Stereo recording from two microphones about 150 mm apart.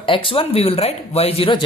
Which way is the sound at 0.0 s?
35° left (ahead or behind).